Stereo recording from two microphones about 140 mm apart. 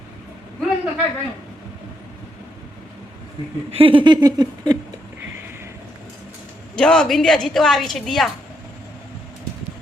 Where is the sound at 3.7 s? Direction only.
40° right (ahead or behind).